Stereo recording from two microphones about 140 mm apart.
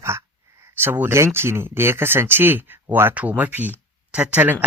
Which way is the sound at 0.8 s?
15° right (ahead or behind).